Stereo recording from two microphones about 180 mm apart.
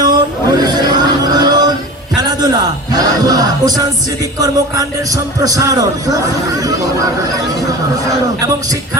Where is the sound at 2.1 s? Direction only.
20° right (ahead or behind).